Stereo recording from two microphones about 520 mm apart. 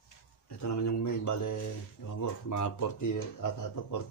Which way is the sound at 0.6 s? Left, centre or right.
Left.